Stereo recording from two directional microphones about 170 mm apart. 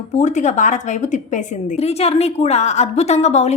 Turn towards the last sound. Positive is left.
turn(degrees=40)  # may be behind; listen again after turning